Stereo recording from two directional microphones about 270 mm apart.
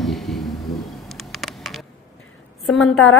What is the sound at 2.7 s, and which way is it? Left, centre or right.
Speech, left.